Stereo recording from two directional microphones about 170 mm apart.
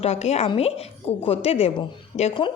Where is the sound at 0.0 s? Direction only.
40° left (ahead or behind).